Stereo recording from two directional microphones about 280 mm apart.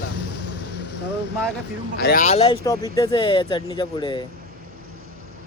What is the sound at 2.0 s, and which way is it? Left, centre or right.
Speech, left.